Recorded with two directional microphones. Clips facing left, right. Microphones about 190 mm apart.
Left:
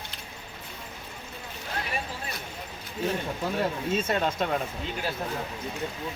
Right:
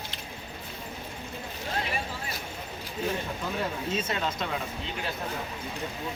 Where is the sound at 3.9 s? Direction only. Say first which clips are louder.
Left 4 dB; 50° left (ahead or behind).